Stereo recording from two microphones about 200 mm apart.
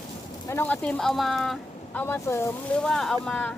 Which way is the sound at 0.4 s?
10° left (ahead or behind).